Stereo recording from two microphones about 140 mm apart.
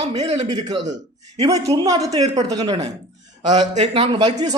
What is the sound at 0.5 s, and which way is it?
A man's voice, 30° right (ahead or behind).